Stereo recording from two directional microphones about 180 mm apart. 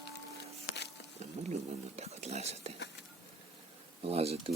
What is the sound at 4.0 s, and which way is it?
Speech, 35° right (ahead or behind).